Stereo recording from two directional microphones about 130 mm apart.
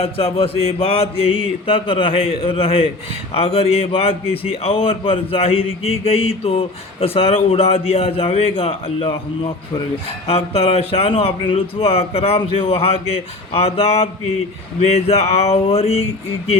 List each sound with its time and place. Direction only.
0.0 s a man's voice: 45° left (ahead or behind)